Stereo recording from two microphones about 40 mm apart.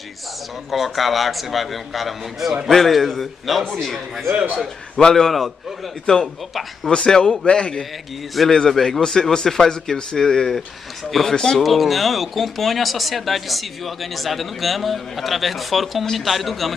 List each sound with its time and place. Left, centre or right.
0.7 s speech: centre
4.6 s speech: centre
5.1 s speech: centre
6.9 s a man's voice: left
8.6 s speech: centre
11.1 s speech: centre